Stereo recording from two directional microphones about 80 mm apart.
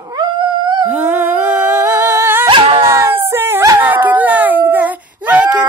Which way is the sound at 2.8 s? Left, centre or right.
Right.